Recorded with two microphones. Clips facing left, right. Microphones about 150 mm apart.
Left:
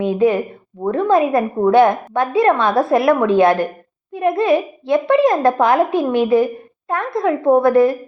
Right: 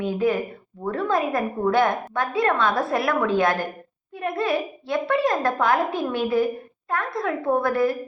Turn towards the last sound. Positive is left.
turn(degrees=20)  # may be behind; listen again after turning